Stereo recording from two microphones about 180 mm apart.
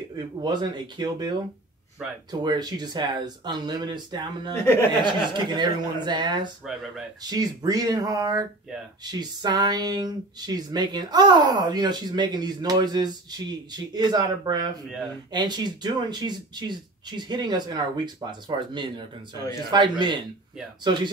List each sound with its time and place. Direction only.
0.1 s speech: 25° right (ahead or behind)
2.0 s speech: 5° right (ahead or behind)
2.4 s speech: 25° right (ahead or behind)
6.6 s speech: centre (ahead or behind)
7.2 s speech: 20° right (ahead or behind)